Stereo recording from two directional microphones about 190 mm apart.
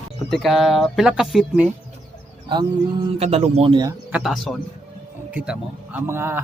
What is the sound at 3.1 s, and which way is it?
Speech, 30° right (ahead or behind).